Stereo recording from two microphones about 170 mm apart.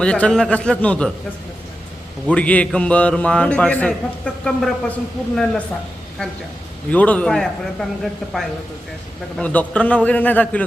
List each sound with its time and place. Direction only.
0.0 s speech: 5° left (ahead or behind)
2.2 s a man's voice: 5° left (ahead or behind)
6.9 s a man's voice: 10° left (ahead or behind)